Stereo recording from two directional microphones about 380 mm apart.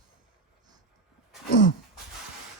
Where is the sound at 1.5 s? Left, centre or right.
Left.